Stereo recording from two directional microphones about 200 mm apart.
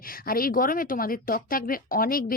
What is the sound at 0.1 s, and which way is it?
Speech, 45° left (ahead or behind).